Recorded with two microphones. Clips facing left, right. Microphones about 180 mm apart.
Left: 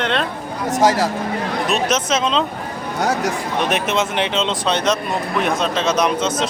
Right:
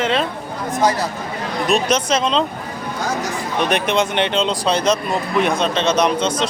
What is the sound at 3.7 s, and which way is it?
A man's voice, 5° left (ahead or behind).